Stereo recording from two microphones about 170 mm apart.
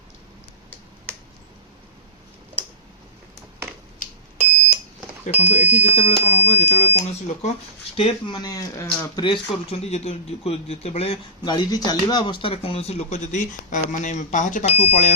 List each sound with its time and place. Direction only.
5.4 s speech: 40° left (ahead or behind)
7.9 s speech: 30° left (ahead or behind)
9.2 s speech: 30° left (ahead or behind); by 15.1 s 45° left (ahead or behind)